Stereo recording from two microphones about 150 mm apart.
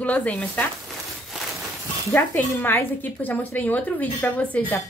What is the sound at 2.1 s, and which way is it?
A woman's voice, 15° left (ahead or behind).